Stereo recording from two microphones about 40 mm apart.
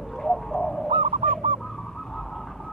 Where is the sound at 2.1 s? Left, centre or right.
Centre.